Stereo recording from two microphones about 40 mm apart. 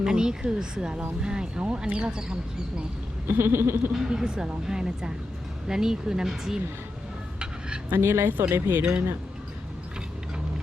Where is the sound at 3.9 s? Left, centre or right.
Centre.